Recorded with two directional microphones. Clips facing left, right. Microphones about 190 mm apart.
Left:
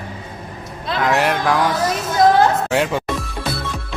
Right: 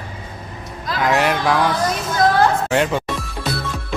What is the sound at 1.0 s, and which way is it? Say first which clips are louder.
Speech: even; centre (ahead or behind).